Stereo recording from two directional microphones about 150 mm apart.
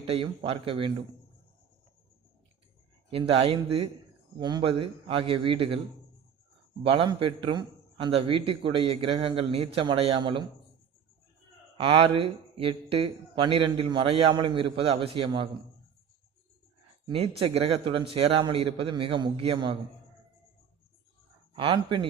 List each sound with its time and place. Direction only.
0.1 s a man's voice: 40° right (ahead or behind)
3.1 s a man's voice: 40° right (ahead or behind)
4.4 s a man's voice: 30° right (ahead or behind)
6.8 s a man's voice: 35° right (ahead or behind)
11.8 s a man's voice: 35° right (ahead or behind)
17.1 s a man's voice: 40° right (ahead or behind)
21.5 s a man's voice: 35° right (ahead or behind)